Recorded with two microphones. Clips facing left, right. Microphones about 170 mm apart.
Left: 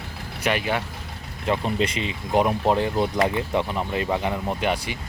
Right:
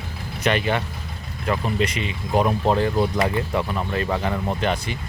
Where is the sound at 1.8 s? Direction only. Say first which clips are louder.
Right 1 dB; 30° left (ahead or behind).